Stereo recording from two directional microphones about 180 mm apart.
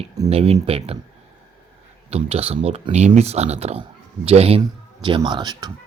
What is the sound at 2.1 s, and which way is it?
Speech, 35° right (ahead or behind).